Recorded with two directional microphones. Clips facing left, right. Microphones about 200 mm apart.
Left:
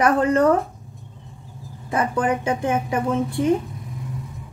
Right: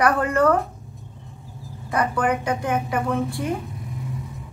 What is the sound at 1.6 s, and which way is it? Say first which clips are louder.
A woman's voice: even; 20° left (ahead or behind).